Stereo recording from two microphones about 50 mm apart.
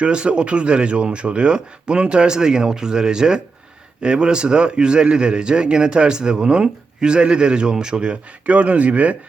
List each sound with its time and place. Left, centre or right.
0.0 s speech: right